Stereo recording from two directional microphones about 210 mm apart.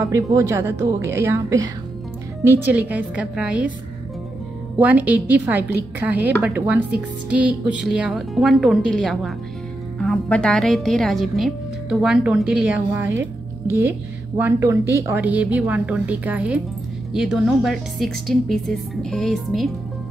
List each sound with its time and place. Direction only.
0.0 s speech: 15° right (ahead or behind)
4.7 s a woman's voice: 5° right (ahead or behind)